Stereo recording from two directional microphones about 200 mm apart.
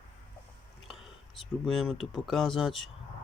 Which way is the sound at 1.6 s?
Centre (ahead or behind).